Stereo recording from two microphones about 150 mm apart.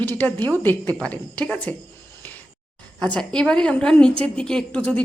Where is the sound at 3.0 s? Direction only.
5° left (ahead or behind).